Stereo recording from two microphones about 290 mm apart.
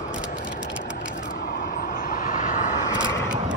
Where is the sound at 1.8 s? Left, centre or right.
Left.